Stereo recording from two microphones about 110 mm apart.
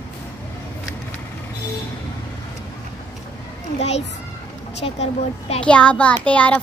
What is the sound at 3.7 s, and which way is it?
Children playing, 80° left.